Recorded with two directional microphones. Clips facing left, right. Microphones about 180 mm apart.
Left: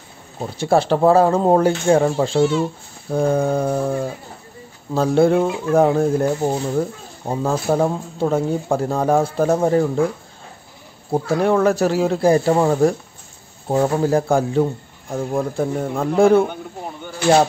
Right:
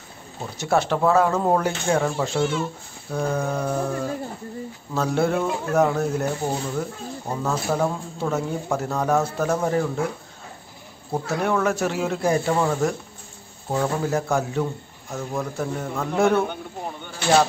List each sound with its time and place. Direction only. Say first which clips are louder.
0.6 s speech: left 5 dB; 30° left (ahead or behind)
11.1 s speech: left 6 dB; 30° left (ahead or behind)